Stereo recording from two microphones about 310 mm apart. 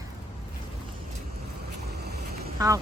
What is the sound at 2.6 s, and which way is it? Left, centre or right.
Speech, centre.